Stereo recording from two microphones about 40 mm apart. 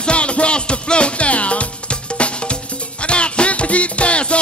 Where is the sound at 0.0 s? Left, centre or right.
Left.